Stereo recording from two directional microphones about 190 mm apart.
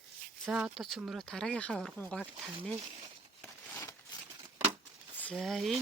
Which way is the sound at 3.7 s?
15° left (ahead or behind).